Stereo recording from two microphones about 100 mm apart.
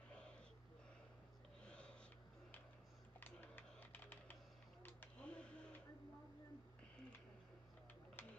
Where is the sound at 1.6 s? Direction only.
10° left (ahead or behind).